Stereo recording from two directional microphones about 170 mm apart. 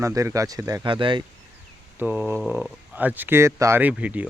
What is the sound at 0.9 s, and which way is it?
Speech, 30° right (ahead or behind).